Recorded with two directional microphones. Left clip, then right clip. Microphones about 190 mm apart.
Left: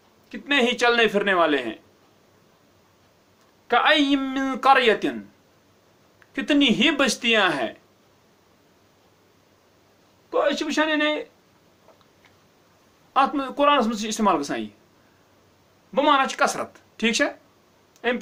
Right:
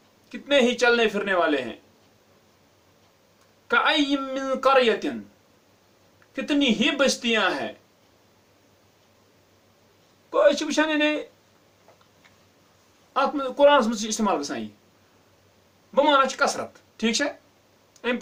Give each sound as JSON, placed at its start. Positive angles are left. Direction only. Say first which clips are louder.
{"t": 0.3, "sound": "speech", "louder": "right 1 dB", "side_deg": 30}
{"t": 3.7, "sound": "speech", "louder": "left 3 dB", "side_deg": 30}
{"t": 6.3, "sound": "speech", "louder": "left 3 dB", "side_deg": 35}
{"t": 10.2, "sound": "a man's voice", "louder": "right 3 dB", "side_deg": 25}
{"t": 13.1, "sound": "speech", "louder": "left 1 dB", "side_deg": 30}
{"t": 16.0, "sound": "speech", "louder": "even", "side_deg": 30}